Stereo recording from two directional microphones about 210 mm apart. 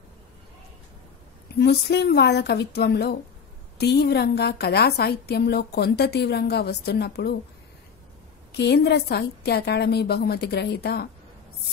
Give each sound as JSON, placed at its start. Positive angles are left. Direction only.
{"t": 1.6, "sound": "a woman's voice", "side_deg": 50}
{"t": 8.5, "sound": "a woman's voice", "side_deg": 50}